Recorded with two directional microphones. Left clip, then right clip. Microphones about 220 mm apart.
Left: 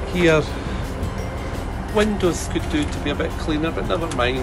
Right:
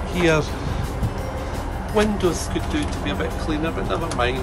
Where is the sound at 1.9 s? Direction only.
15° right (ahead or behind).